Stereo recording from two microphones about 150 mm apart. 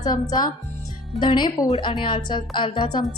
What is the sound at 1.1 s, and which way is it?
A woman's voice, 30° left (ahead or behind).